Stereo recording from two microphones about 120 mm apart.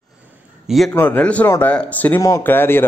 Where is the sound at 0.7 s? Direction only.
Centre (ahead or behind).